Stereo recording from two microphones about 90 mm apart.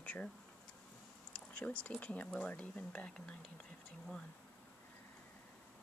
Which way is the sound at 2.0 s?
15° left (ahead or behind).